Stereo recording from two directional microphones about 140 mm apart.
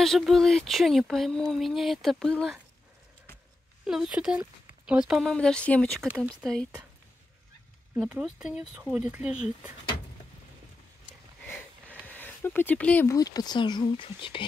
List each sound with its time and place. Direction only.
0.0 s speech: centre (ahead or behind)
3.8 s speech: 5° right (ahead or behind)
6.0 s speech: 5° right (ahead or behind)
7.9 s speech: 10° right (ahead or behind)
11.4 s a sound: 10° left (ahead or behind)
13.1 s speech: 25° left (ahead or behind)